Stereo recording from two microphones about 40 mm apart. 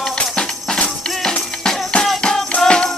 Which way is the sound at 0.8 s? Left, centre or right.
Left.